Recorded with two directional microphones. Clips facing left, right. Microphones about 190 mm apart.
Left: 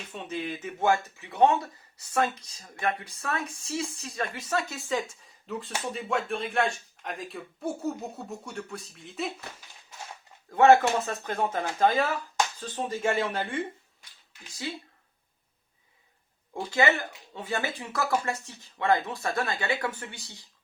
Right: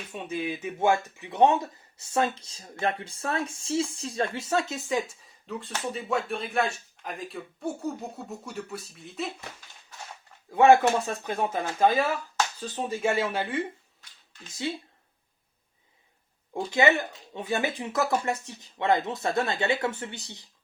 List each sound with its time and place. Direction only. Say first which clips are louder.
0.1 s speech: right 2 dB; 10° right (ahead or behind)
5.5 s speech: even; centre (ahead or behind)
10.5 s speech: right 1 dB; 15° right (ahead or behind)
16.6 s speech: right 2 dB; 20° right (ahead or behind)